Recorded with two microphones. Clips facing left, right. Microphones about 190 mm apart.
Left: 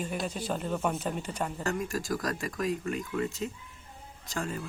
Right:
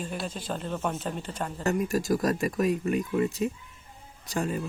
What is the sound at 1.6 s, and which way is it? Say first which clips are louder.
Speech: right 8 dB; 20° right (ahead or behind).